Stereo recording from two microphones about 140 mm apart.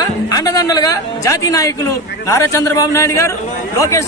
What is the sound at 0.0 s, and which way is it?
Speech, 25° left (ahead or behind).